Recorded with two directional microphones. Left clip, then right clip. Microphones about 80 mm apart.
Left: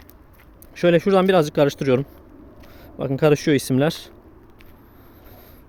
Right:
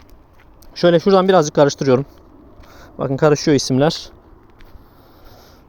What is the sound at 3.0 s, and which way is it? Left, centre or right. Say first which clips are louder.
Speech: right 3 dB; right.